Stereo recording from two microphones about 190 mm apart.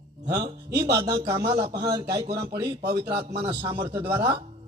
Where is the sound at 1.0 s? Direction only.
20° right (ahead or behind).